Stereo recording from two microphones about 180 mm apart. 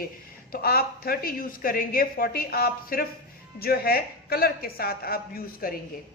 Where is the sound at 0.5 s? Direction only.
55° left (ahead or behind).